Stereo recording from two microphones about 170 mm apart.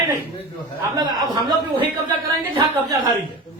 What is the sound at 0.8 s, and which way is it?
Speech, 20° right (ahead or behind).